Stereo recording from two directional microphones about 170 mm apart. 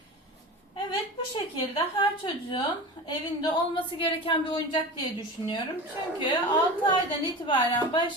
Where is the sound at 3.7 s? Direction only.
30° left (ahead or behind).